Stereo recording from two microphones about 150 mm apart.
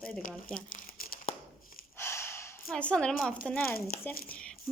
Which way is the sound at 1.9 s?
15° left (ahead or behind).